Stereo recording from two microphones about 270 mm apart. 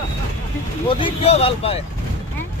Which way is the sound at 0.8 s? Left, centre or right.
Centre.